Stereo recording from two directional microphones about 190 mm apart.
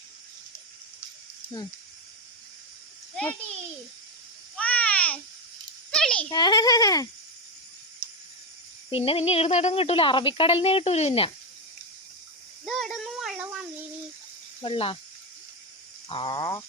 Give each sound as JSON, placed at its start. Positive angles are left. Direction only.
{"t": 4.5, "sound": "a sound", "side_deg": 5}
{"t": 6.3, "sound": "speech", "side_deg": 20}
{"t": 8.9, "sound": "speech", "side_deg": 30}
{"t": 12.6, "sound": "child singing", "side_deg": 0}
{"t": 14.6, "sound": "speech", "side_deg": 30}
{"t": 16.0, "sound": "speech", "side_deg": 25}